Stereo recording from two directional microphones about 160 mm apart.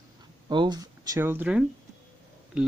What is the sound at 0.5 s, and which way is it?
Speech, 30° right (ahead or behind).